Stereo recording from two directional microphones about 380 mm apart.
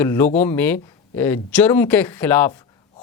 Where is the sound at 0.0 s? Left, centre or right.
Centre.